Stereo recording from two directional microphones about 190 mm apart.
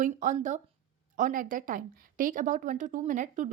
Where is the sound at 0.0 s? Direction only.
40° right (ahead or behind).